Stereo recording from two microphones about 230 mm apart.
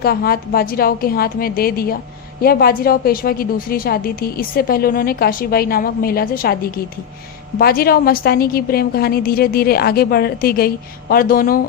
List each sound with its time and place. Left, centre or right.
0.0 s a woman's voice: left